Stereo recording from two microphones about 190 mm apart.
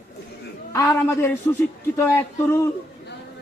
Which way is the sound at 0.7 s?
15° left (ahead or behind).